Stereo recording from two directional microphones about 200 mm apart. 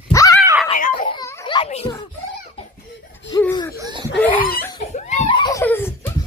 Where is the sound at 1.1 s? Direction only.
15° left (ahead or behind).